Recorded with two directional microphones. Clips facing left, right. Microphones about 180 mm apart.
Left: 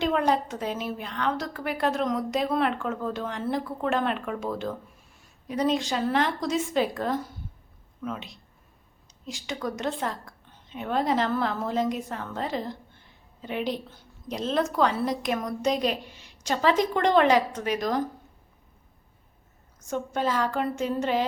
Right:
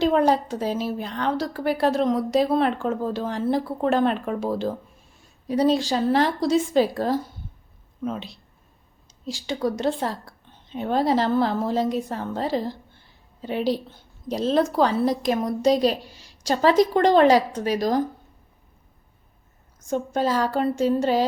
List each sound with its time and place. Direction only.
0.0 s a woman's voice: 35° right (ahead or behind)
19.9 s a woman's voice: 35° right (ahead or behind)